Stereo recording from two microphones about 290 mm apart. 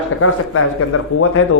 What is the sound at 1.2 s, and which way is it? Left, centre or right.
Speech, left.